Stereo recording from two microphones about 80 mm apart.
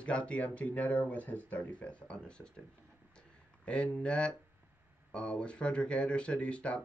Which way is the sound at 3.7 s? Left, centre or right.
Centre.